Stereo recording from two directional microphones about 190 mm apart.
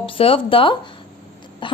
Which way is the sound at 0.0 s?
30° left (ahead or behind).